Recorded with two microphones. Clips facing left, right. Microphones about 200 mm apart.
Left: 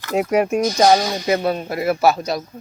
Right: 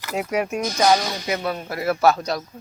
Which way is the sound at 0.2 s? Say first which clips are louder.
Left 6 dB; 45° left (ahead or behind).